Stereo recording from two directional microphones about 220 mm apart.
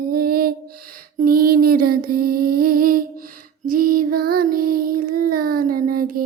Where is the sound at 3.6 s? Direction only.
40° right (ahead or behind).